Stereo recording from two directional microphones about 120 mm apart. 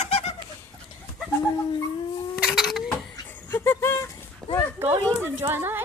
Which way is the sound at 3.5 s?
20° left (ahead or behind).